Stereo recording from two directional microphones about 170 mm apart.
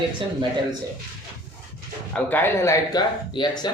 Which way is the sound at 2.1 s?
10° left (ahead or behind).